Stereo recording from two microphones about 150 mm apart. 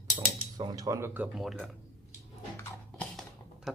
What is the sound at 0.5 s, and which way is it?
Speech, 25° right (ahead or behind).